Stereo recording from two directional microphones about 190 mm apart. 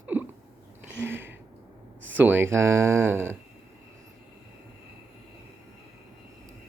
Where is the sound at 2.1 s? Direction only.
10° right (ahead or behind).